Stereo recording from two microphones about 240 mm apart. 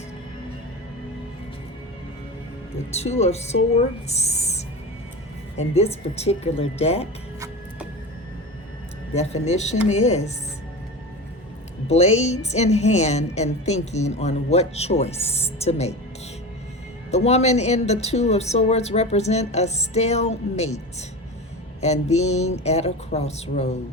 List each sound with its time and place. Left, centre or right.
2.9 s a woman's voice: left
7.3 s music: centre
9.1 s a woman's voice: left
11.9 s a woman's voice: left
17.1 s a woman's voice: left